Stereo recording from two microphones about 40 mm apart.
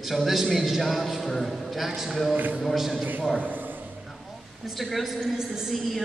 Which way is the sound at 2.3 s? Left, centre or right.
Right.